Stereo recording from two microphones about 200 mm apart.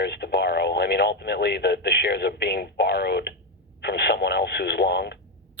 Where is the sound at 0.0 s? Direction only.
55° left (ahead or behind).